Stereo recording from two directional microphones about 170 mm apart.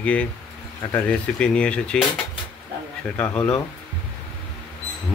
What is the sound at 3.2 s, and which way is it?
Speech, 10° left (ahead or behind).